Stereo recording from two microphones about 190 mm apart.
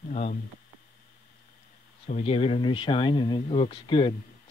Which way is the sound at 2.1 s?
30° left (ahead or behind).